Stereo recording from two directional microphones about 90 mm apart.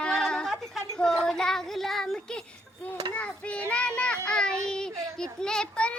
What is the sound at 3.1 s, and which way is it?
A child's voice, 15° left (ahead or behind).